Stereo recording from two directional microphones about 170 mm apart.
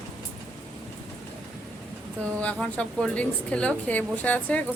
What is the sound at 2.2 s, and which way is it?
A woman's voice, 5° left (ahead or behind).